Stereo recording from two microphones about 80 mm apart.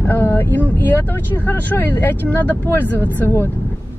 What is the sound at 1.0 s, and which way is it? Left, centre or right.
Speech, left.